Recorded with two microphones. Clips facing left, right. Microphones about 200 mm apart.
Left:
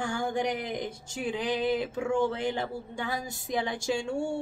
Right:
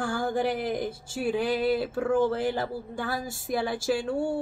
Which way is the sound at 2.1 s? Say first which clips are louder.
Right 3 dB; 5° right (ahead or behind).